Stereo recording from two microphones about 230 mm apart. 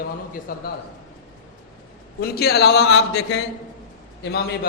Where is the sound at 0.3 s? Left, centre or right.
Left.